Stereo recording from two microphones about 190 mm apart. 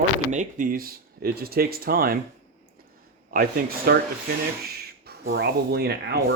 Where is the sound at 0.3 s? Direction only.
40° right (ahead or behind).